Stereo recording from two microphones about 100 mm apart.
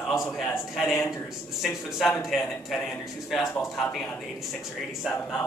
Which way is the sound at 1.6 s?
Centre (ahead or behind).